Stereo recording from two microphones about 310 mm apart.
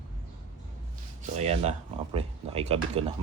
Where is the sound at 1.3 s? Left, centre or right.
Right.